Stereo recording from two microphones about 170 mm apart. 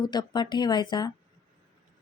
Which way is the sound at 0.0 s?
25° left (ahead or behind).